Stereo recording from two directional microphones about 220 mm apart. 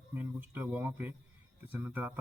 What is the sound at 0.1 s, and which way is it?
Speech, 10° right (ahead or behind).